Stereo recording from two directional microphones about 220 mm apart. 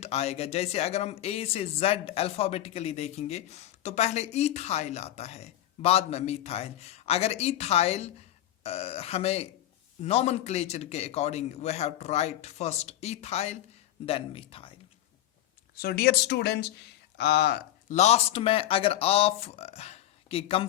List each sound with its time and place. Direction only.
0.0 s speech: 30° left (ahead or behind)
15.8 s speech: 45° left (ahead or behind)
17.9 s speech: 30° left (ahead or behind)